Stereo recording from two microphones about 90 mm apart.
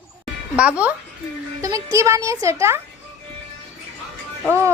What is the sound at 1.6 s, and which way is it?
Speech, 35° right (ahead or behind).